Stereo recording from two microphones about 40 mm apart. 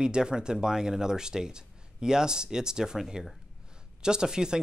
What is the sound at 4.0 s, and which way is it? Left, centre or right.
Speech, centre.